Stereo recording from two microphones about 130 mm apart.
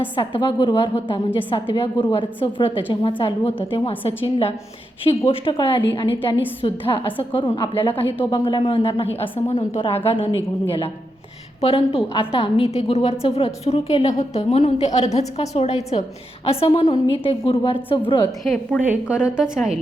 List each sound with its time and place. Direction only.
0.2 s a woman's voice: 40° left (ahead or behind)
11.6 s a woman's voice: 50° left (ahead or behind)
18.4 s a woman's voice: 5° left (ahead or behind)
18.8 s a woman's voice: 10° right (ahead or behind)